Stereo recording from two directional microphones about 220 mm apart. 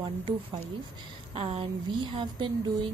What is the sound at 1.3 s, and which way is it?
A woman's voice, 25° right (ahead or behind).